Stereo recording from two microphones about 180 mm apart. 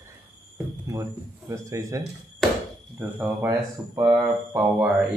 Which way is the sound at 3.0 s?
5° right (ahead or behind).